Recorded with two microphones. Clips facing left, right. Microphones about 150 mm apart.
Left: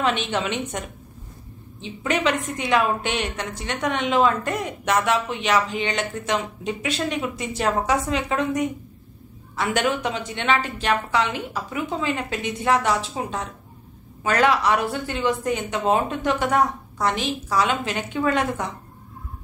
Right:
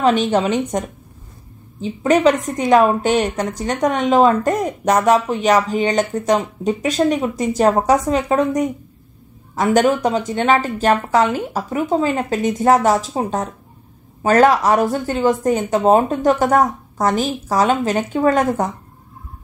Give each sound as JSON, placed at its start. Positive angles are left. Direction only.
{"t": 0.0, "sound": "a woman's voice", "side_deg": -40}